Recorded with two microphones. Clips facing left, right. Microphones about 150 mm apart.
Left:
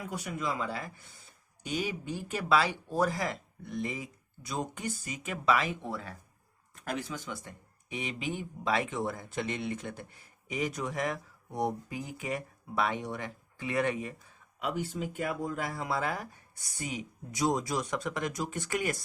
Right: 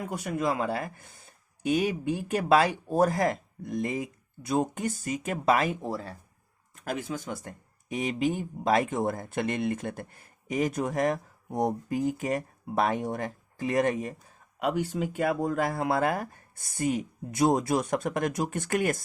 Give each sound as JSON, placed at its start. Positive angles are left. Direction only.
{"t": 0.0, "sound": "speech", "side_deg": -50}
{"t": 6.8, "sound": "speech", "side_deg": -45}
{"t": 14.6, "sound": "speech", "side_deg": -75}